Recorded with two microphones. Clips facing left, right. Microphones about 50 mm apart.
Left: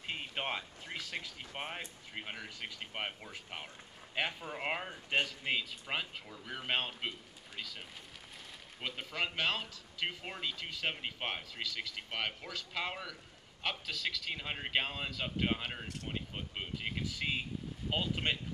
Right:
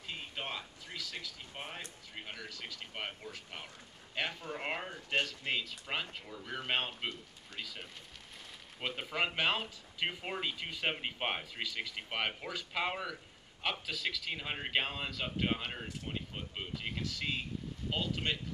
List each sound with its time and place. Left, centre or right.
0.0 s speech: left; by 7.8 s centre
8.8 s speech: centre